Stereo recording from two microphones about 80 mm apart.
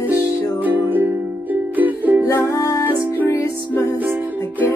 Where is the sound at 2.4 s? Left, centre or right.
Left.